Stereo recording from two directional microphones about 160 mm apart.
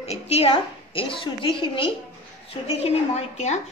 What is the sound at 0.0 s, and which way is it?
A woman's voice, 40° left (ahead or behind).